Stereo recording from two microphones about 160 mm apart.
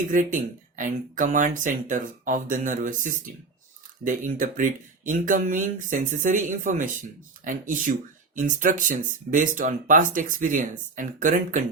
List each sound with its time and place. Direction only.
0.1 s speech: 55° right (ahead or behind)